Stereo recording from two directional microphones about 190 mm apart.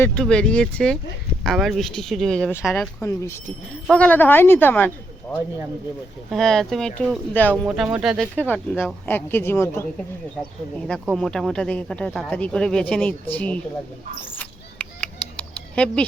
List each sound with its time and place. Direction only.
0.0 s speech: 5° left (ahead or behind)
3.0 s speech: 15° left (ahead or behind)
6.3 s speech: centre (ahead or behind)
7.5 s speech: 5° right (ahead or behind)
8.4 s speech: 10° left (ahead or behind)
10.8 s speech: centre (ahead or behind)
14.3 s a sound: 5° left (ahead or behind)